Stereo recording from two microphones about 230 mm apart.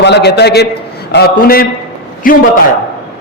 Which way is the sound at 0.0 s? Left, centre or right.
Left.